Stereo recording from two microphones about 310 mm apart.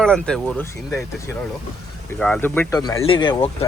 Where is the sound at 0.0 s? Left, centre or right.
Centre.